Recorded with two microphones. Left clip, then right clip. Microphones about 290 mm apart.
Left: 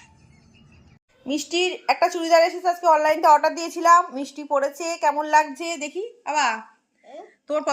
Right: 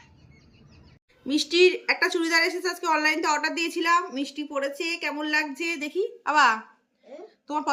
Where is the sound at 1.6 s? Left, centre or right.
Right.